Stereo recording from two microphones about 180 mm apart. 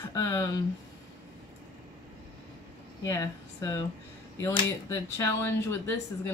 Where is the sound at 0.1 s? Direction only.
20° left (ahead or behind).